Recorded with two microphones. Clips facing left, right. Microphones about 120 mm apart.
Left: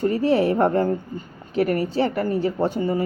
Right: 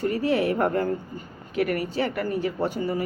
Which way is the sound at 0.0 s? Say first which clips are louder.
Left 4 dB; 30° left (ahead or behind).